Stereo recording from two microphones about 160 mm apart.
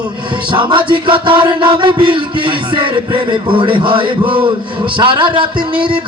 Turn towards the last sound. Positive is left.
turn(degrees=-30)  # may be behind; listen again after turning